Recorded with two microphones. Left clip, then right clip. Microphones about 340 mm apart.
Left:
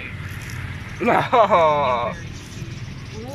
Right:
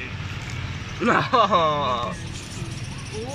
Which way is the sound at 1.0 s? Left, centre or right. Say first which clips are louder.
Left 3 dB; centre.